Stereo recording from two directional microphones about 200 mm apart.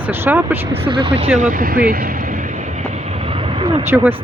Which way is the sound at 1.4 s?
45° right (ahead or behind).